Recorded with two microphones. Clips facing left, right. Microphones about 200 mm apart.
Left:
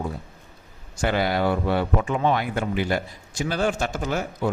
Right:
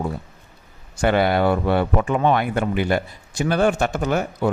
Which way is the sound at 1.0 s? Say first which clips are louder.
Right 5 dB; 55° right (ahead or behind).